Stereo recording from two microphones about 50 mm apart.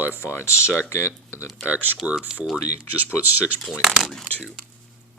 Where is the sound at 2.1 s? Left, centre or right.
Centre.